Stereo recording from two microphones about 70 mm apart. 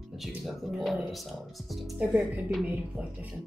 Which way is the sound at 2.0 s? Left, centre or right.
Centre.